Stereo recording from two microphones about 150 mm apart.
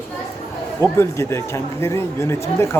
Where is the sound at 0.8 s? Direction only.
15° left (ahead or behind).